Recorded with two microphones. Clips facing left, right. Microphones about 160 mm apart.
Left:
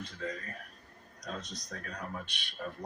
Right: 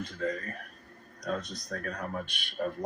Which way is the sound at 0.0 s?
50° right (ahead or behind).